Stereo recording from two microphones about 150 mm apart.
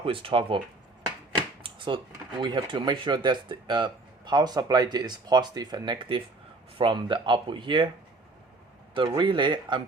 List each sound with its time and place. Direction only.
0.0 s speech: 35° right (ahead or behind)
1.4 s a sound: 30° right (ahead or behind)
2.4 s speech: 30° right (ahead or behind)
9.0 s speech: 30° right (ahead or behind)